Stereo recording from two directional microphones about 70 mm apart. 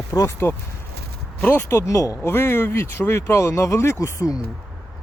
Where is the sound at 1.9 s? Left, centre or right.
Left.